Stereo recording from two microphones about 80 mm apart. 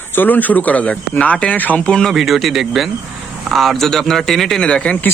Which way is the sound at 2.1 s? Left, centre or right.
Centre.